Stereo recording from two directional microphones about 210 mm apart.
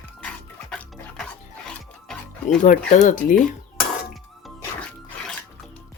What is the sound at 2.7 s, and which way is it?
Speech, 35° left (ahead or behind).